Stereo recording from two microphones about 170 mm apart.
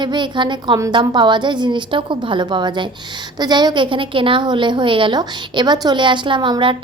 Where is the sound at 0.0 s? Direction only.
25° right (ahead or behind).